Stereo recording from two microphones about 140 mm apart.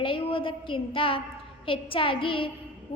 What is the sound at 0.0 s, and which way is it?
A woman's voice, 40° left (ahead or behind).